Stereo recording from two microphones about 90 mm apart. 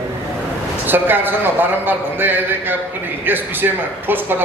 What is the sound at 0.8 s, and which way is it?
A man's voice, 20° right (ahead or behind).